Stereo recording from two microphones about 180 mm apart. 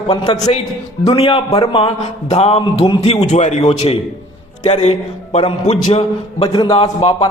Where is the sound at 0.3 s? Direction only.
40° left (ahead or behind).